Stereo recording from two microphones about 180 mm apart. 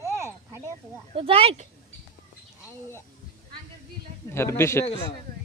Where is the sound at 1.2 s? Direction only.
30° right (ahead or behind).